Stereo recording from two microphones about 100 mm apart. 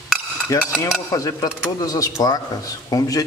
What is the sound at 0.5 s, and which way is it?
A man's voice, 30° left (ahead or behind).